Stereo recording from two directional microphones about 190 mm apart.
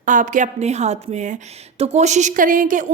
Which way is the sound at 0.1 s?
40° right (ahead or behind).